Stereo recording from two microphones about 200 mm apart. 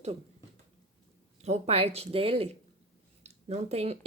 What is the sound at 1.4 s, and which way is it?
A woman's voice, 30° right (ahead or behind).